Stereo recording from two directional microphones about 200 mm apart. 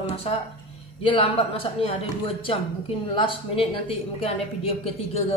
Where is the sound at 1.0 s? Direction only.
25° left (ahead or behind).